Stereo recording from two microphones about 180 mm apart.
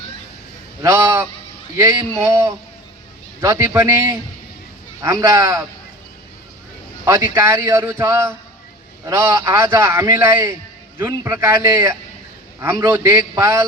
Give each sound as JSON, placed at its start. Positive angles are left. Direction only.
{"t": 0.8, "sound": "a man's voice", "side_deg": -15}
{"t": 3.4, "sound": "a man's voice", "side_deg": -15}
{"t": 7.0, "sound": "a man's voice", "side_deg": -15}